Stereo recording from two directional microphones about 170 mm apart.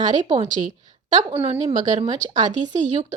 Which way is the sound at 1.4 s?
35° right (ahead or behind).